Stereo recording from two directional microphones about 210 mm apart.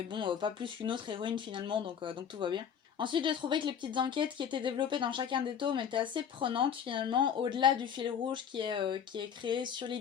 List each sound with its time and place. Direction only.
0.1 s speech: 25° right (ahead or behind)